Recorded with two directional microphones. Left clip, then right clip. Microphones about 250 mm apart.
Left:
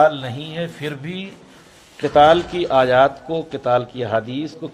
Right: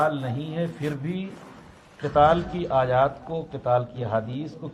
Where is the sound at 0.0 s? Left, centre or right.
Left.